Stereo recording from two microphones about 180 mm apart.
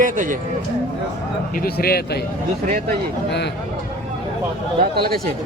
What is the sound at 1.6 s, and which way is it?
Speech, 60° left (ahead or behind).